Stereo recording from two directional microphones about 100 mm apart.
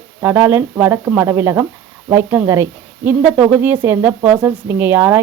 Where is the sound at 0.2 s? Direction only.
25° right (ahead or behind).